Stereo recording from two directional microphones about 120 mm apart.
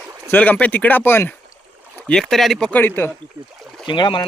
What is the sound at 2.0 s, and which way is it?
Speech, 5° left (ahead or behind).